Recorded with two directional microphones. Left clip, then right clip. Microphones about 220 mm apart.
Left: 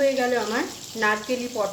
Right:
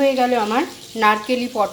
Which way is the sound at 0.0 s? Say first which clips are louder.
Right 5 dB; 15° right (ahead or behind).